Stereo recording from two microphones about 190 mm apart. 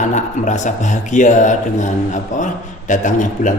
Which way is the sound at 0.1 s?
40° left (ahead or behind).